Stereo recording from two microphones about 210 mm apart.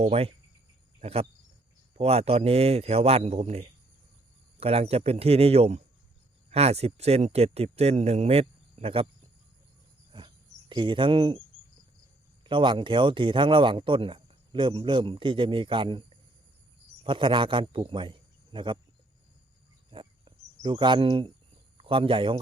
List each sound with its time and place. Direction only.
0.0 s speech: 30° right (ahead or behind)
10.1 s a sound: 20° right (ahead or behind)
12.5 s a man's voice: 25° right (ahead or behind)
19.9 s cricket: 25° right (ahead or behind)
21.8 s speech: 25° right (ahead or behind)